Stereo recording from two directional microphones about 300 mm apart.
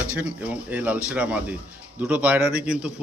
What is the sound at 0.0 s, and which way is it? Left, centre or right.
Speech, centre.